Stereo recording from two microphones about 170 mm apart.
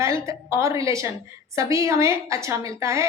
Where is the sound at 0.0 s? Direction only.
15° right (ahead or behind).